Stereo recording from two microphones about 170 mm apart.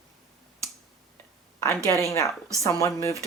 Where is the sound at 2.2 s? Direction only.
15° left (ahead or behind).